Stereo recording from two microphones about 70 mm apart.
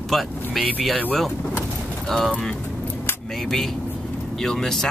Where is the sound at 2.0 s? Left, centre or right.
Centre.